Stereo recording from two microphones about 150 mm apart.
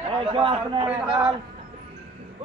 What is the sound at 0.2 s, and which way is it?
Speech, 35° right (ahead or behind).